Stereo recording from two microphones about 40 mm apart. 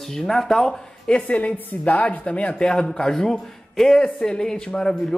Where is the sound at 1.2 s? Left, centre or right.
Left.